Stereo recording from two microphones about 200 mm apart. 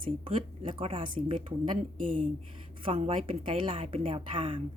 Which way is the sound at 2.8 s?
25° right (ahead or behind).